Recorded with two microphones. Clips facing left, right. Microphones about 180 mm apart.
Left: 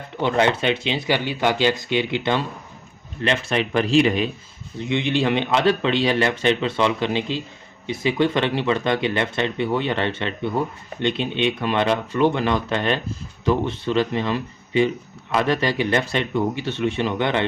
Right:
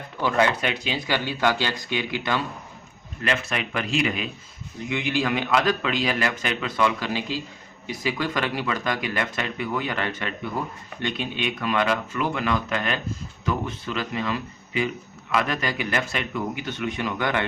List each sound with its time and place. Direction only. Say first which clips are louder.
0.2 s speech: left 3 dB; 25° left (ahead or behind)